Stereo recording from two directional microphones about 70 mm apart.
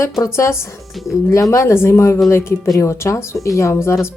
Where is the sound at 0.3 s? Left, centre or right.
Left.